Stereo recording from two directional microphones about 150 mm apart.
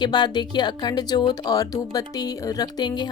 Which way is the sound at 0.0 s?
30° left (ahead or behind).